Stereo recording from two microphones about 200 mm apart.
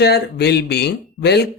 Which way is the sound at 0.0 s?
55° left (ahead or behind).